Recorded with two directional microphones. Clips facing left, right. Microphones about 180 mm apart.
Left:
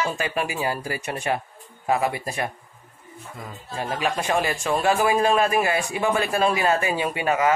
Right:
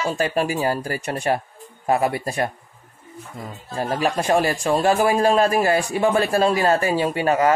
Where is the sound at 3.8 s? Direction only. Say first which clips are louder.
Right 4 dB; 45° right (ahead or behind).